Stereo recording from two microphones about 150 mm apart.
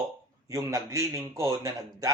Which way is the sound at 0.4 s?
20° right (ahead or behind).